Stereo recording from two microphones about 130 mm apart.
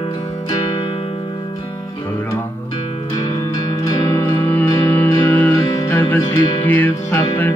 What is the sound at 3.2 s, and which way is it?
Music, 30° left (ahead or behind).